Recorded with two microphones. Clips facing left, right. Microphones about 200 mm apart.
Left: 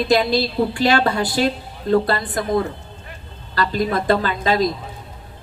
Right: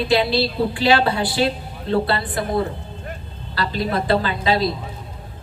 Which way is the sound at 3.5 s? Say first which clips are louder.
Left 2 dB; 45° left (ahead or behind).